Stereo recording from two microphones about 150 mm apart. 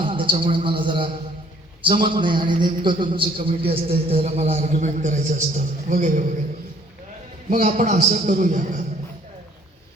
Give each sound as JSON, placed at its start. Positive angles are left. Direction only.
{"t": 0.0, "sound": "a sound", "side_deg": -35}
{"t": 1.8, "sound": "a man's voice", "side_deg": -30}
{"t": 7.5, "sound": "a man's voice", "side_deg": -55}